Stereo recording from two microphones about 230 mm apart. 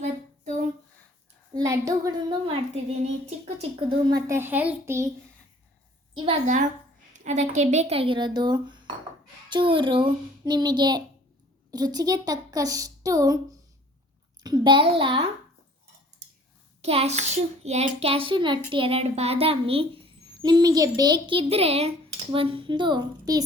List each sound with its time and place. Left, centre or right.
1.5 s a child's voice: centre
4.3 s a child's voice: centre
6.1 s a child's voice: right
16.8 s a child's voice: right